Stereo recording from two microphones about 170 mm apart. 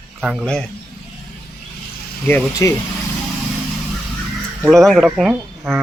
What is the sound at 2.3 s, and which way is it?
Speech, 20° left (ahead or behind).